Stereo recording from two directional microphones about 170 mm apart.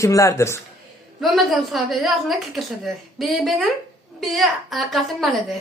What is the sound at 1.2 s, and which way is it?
A woman's voice, centre (ahead or behind).